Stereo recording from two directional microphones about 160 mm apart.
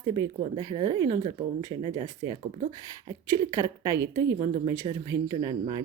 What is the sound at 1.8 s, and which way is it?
Speech, 30° right (ahead or behind).